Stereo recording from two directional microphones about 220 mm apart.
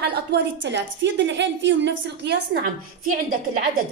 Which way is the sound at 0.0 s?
50° right (ahead or behind).